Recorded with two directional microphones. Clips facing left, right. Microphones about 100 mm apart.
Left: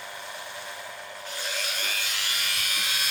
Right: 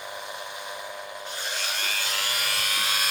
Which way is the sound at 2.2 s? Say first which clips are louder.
Right 3 dB; 40° right (ahead or behind).